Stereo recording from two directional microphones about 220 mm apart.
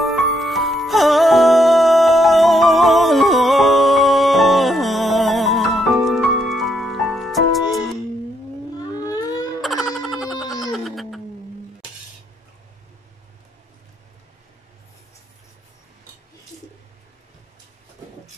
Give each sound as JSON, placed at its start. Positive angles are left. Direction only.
{"t": 0.0, "sound": "music", "side_deg": 0}
{"t": 8.7, "sound": "civil defense siren", "side_deg": 15}
{"t": 9.6, "sound": "a sound", "side_deg": 0}
{"t": 10.4, "sound": "music", "side_deg": 15}
{"t": 10.7, "sound": "music", "side_deg": 0}